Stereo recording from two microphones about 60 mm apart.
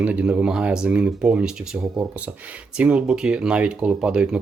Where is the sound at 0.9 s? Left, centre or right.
Right.